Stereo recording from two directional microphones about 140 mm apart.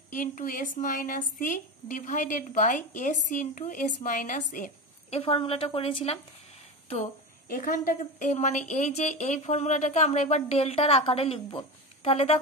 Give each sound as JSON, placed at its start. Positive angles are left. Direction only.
{"t": 0.1, "sound": "a woman's voice", "side_deg": 65}
{"t": 5.1, "sound": "a woman's voice", "side_deg": 45}
{"t": 7.0, "sound": "a woman's voice", "side_deg": 80}